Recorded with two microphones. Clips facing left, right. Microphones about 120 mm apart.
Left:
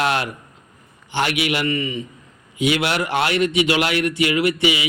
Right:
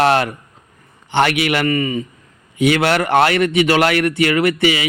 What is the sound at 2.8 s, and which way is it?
Speech, 55° right (ahead or behind).